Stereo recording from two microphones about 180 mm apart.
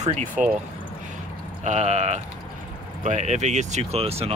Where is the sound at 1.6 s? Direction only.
40° right (ahead or behind).